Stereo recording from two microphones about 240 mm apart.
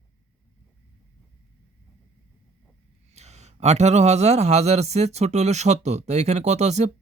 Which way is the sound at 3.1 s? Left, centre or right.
Right.